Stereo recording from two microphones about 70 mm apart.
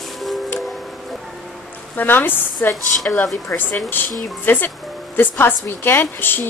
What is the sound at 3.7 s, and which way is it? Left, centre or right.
A woman's voice, left.